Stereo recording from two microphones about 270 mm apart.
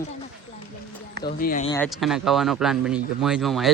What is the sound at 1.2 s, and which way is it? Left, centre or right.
Speech, left.